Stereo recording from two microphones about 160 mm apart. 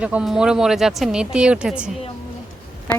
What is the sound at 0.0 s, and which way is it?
Speech, 5° right (ahead or behind).